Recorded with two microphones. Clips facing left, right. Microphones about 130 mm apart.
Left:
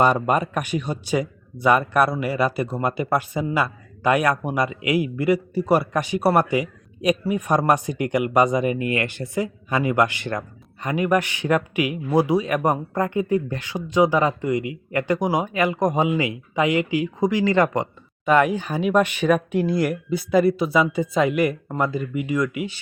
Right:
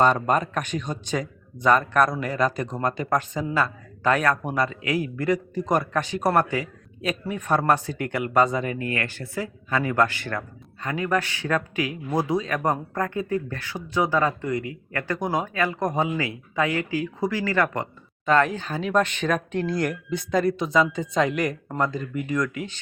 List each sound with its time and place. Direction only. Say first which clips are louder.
0.0 s speech: left 1 dB; 10° left (ahead or behind)